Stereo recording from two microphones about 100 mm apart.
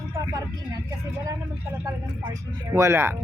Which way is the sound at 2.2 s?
40° right (ahead or behind).